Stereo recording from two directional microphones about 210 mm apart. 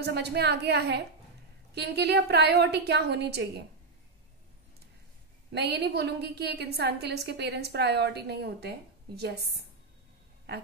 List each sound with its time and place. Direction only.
0.0 s a woman's voice: 50° right (ahead or behind)
5.5 s a woman's voice: 50° right (ahead or behind)